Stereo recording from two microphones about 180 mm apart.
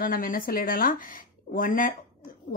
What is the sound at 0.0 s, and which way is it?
Speech, 50° left (ahead or behind).